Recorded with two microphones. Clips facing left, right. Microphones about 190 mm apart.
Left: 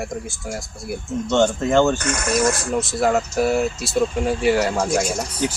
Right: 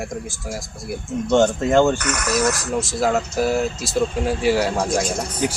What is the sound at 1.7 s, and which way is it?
Speech, 10° right (ahead or behind).